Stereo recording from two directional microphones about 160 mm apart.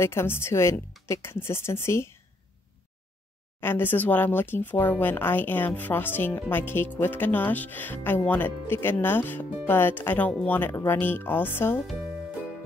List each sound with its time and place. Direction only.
0.0 s speech: 15° left (ahead or behind)
3.6 s speech: 15° left (ahead or behind)